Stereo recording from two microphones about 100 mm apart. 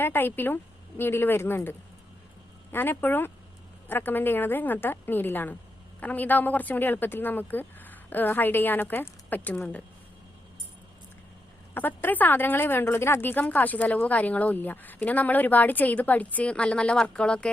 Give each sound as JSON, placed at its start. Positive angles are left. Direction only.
{"t": 0.0, "sound": "a woman's voice", "side_deg": 20}
{"t": 2.7, "sound": "a woman's voice", "side_deg": 20}
{"t": 11.7, "sound": "speech", "side_deg": 20}